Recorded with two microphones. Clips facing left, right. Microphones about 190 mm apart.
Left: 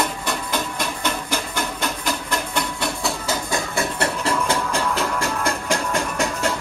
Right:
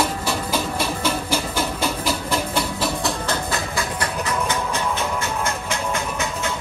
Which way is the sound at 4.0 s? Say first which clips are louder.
Left 2 dB; 30° left (ahead or behind).